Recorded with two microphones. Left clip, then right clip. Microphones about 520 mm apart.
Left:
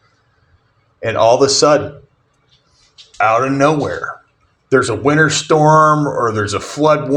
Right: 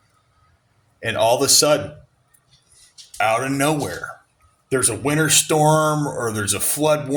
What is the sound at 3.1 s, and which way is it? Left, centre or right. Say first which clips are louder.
Speech: left 6 dB; right.